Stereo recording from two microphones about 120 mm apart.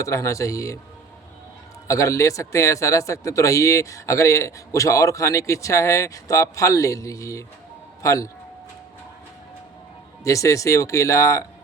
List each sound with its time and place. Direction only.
0.0 s speech: 25° left (ahead or behind)
1.9 s speech: 25° left (ahead or behind)
10.2 s speech: 25° left (ahead or behind)